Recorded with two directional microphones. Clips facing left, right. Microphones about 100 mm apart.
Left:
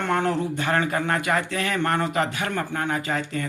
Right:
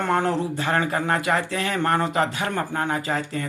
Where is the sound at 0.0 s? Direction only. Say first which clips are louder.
Right 1 dB; 35° right (ahead or behind).